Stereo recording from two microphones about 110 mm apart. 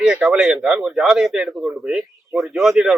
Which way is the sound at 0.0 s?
5° right (ahead or behind).